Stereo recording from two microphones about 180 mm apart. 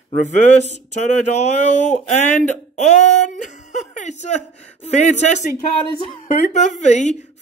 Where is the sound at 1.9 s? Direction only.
45° left (ahead or behind).